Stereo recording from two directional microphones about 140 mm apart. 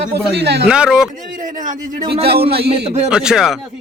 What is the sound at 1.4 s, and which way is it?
Speech, 65° right (ahead or behind).